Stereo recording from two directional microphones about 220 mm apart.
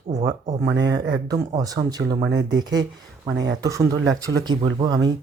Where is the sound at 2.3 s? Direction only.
55° right (ahead or behind).